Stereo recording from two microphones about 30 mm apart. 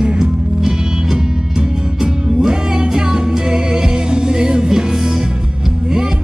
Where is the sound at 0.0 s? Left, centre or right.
Right.